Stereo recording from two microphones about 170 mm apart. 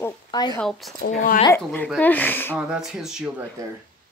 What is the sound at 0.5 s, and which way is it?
Speech, 5° left (ahead or behind).